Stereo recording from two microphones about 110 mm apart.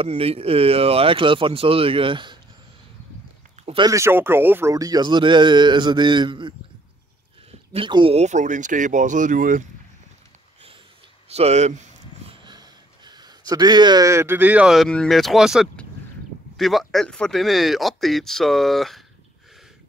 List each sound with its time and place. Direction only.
0.0 s speech: 65° right (ahead or behind)
3.6 s a sound: 90° right
3.9 s speech: 20° right (ahead or behind)
4.7 s a man's voice: 35° right (ahead or behind)
7.7 s a man's voice: 50° right (ahead or behind)
8.2 s speech: 90° right
11.2 s a sound: 70° right (ahead or behind); by 12.4 s 90° right
12.4 s a sound: 40° right (ahead or behind)
14.0 s speech: 20° right (ahead or behind)
14.7 s speech: 5° left (ahead or behind)